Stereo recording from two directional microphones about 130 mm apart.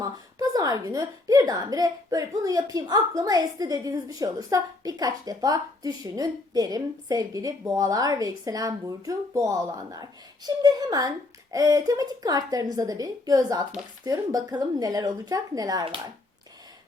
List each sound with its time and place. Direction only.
0.0 s a woman's voice: 30° right (ahead or behind)